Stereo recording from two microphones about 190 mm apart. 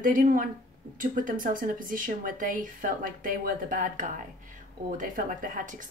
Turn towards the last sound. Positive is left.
turn(degrees=-45)  # may be behind; listen again after turning